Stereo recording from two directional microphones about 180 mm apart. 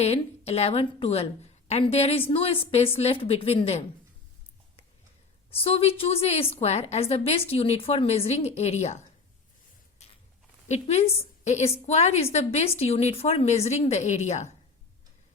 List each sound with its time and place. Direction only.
0.0 s a woman's voice: 35° left (ahead or behind)
5.5 s a woman's voice: 30° left (ahead or behind)
10.7 s a woman's voice: 35° left (ahead or behind)